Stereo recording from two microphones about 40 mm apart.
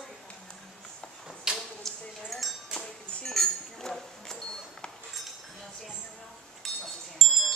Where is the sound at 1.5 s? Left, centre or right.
Right.